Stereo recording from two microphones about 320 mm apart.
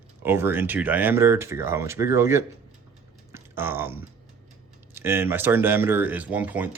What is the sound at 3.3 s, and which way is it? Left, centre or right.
Typing, centre.